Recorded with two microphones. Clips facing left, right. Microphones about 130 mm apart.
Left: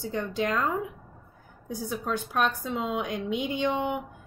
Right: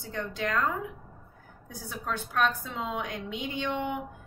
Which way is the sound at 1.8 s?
15° left (ahead or behind).